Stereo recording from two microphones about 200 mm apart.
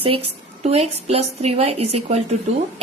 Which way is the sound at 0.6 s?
30° right (ahead or behind).